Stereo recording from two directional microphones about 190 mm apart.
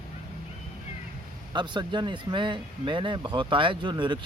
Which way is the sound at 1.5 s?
25° right (ahead or behind).